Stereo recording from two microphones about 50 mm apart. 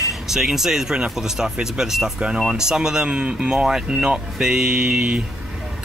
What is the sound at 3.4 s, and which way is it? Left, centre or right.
Speech, centre.